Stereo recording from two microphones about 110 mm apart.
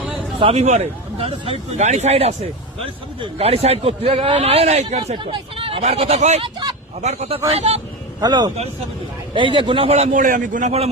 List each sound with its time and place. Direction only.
0.3 s speech: 65° right (ahead or behind)
2.8 s a man's voice: 60° right (ahead or behind); by 5.1 s 80° right
5.2 s speech: 55° right (ahead or behind)
5.8 s speech: 75° right (ahead or behind)
6.4 s speech: 45° right (ahead or behind)
7.0 s speech: 85° right
7.3 s speech: 70° right (ahead or behind)
8.2 s speech: 40° right (ahead or behind)
9.3 s a man's voice: 50° right (ahead or behind)
10.6 s speech: 80° right